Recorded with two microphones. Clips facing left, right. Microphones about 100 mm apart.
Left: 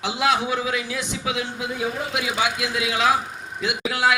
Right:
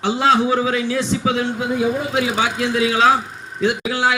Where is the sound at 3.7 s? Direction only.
25° right (ahead or behind).